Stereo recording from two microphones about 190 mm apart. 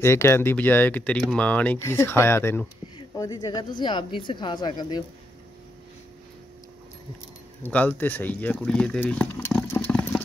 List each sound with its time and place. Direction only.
0.0 s speech: 15° left (ahead or behind)
7.6 s speech: 10° left (ahead or behind)